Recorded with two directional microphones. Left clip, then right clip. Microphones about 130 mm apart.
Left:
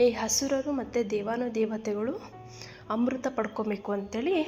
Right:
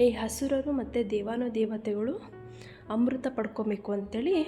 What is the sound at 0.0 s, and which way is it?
A woman's voice, 35° right (ahead or behind).